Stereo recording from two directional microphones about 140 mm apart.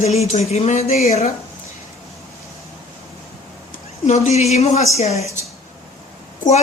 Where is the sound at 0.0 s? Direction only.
50° left (ahead or behind).